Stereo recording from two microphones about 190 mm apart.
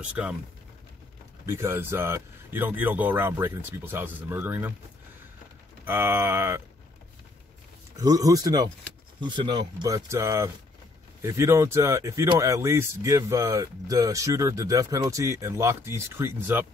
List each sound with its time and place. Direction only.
0.0 s speech: 5° right (ahead or behind)
1.4 s speech: 15° right (ahead or behind)
5.9 s speech: 10° right (ahead or behind)
8.0 s speech: 20° right (ahead or behind)